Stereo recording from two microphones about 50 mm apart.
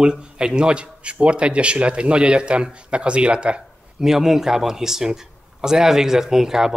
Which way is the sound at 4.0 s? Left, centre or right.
Centre.